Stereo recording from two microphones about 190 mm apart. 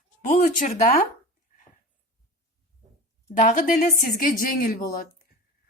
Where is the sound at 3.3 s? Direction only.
40° left (ahead or behind).